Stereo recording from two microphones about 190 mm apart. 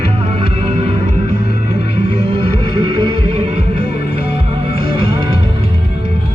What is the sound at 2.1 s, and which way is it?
Music, 30° right (ahead or behind).